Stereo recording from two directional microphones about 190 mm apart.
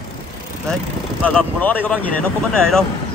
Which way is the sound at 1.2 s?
10° left (ahead or behind).